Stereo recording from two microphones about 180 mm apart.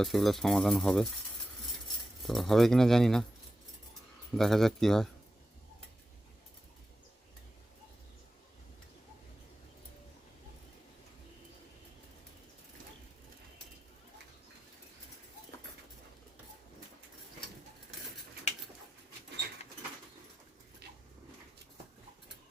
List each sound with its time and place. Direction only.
0.0 s speech: centre (ahead or behind)
2.2 s speech: centre (ahead or behind)
4.4 s speech: centre (ahead or behind)
20.8 s dog: 65° right (ahead or behind)